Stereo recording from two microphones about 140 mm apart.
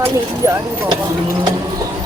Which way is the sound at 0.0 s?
20° right (ahead or behind).